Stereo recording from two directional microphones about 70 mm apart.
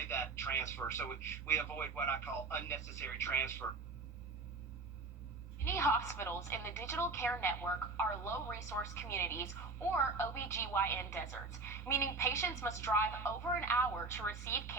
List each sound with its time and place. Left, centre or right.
0.1 s a woman's voice: left
5.6 s a woman's voice: left